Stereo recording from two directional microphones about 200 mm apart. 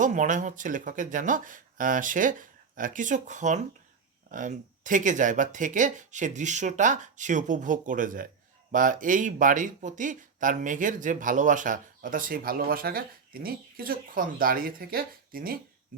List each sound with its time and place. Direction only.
0.0 s speech: 40° right (ahead or behind)